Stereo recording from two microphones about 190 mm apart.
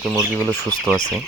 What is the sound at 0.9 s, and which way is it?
Speech, 15° right (ahead or behind).